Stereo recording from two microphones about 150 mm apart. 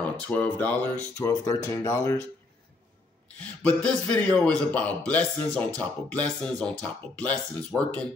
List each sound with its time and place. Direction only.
0.0 s speech: 10° left (ahead or behind)
3.3 s speech: 10° left (ahead or behind)